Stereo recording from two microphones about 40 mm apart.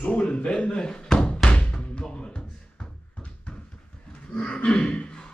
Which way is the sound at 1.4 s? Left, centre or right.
Left.